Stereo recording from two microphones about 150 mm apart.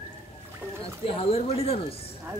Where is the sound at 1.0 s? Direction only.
40° left (ahead or behind).